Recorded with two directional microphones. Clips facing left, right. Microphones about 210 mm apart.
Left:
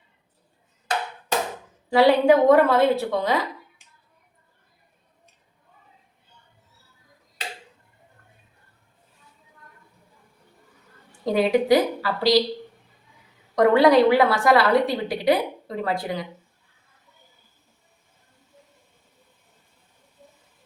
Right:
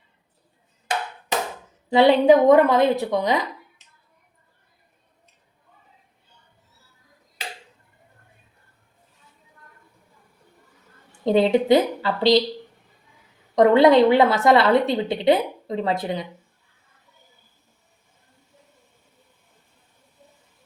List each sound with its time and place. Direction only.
1.9 s a woman's voice: 20° right (ahead or behind)
11.3 s a woman's voice: 25° right (ahead or behind)
13.6 s a woman's voice: 20° right (ahead or behind)